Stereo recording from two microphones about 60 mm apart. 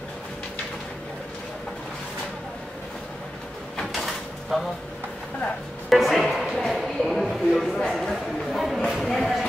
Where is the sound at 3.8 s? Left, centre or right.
Centre.